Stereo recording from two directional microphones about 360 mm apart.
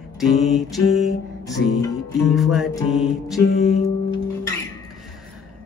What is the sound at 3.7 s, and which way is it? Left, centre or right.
Music, centre.